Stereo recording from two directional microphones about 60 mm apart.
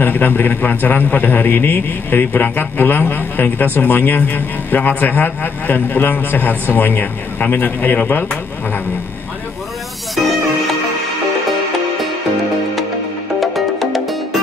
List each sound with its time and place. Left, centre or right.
0.0 s a man's voice: left
13.4 s music: centre